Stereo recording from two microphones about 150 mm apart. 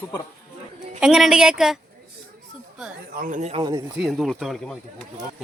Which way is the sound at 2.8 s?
Centre (ahead or behind).